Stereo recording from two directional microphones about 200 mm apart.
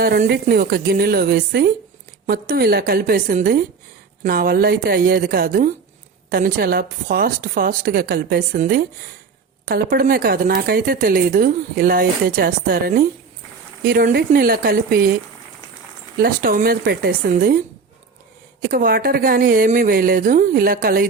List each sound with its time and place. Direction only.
0.0 s speech: 50° right (ahead or behind)
16.2 s speech: 45° right (ahead or behind)
18.6 s speech: 50° right (ahead or behind)